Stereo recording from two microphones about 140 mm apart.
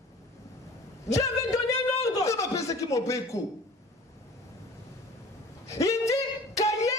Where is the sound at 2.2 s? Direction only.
20° left (ahead or behind).